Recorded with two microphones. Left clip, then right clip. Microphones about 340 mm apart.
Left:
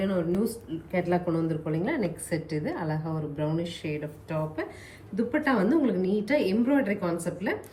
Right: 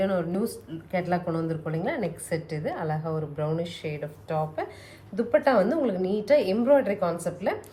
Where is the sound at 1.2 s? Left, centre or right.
Right.